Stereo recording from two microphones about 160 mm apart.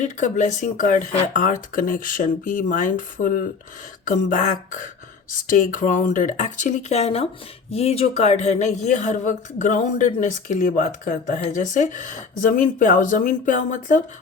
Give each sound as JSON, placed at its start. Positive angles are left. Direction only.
{"t": 0.0, "sound": "speech", "side_deg": 50}